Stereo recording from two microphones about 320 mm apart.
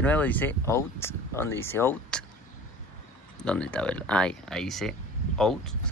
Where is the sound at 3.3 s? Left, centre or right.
Centre.